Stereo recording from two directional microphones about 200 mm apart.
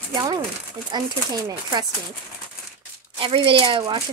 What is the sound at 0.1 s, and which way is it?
Speech, 20° right (ahead or behind).